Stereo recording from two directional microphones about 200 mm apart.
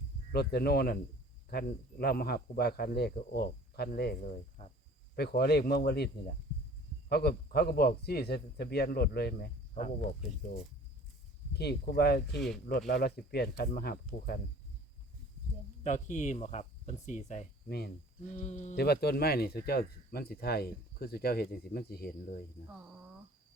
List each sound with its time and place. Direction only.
0.3 s speech: 50° left (ahead or behind)
4.6 s speech: 35° left (ahead or behind)
5.1 s speech: 55° left (ahead or behind)
7.1 s speech: 55° left (ahead or behind)
11.5 s speech: 55° left (ahead or behind)
12.4 s speech: centre (ahead or behind)
12.9 s speech: 50° left (ahead or behind)
15.8 s speech: 35° left (ahead or behind)
17.7 s speech: 55° left (ahead or behind)
18.3 s speech: 35° left (ahead or behind)
18.8 s speech: 55° left (ahead or behind)